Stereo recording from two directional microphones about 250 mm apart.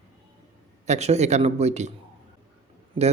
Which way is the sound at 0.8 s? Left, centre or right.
Right.